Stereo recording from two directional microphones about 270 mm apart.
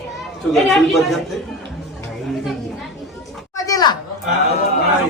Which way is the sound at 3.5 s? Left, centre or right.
Centre.